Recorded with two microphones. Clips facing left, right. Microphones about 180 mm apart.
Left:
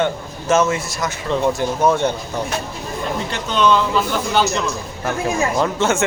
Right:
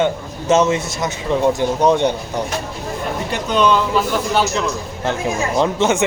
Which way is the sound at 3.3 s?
10° right (ahead or behind).